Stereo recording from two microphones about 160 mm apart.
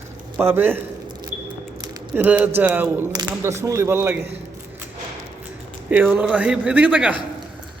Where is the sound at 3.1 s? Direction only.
20° right (ahead or behind).